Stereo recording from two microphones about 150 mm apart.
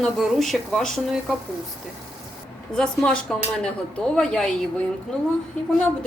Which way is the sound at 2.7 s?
5° left (ahead or behind).